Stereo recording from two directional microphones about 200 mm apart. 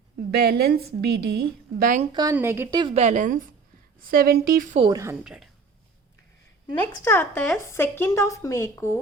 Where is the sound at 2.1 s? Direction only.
15° right (ahead or behind).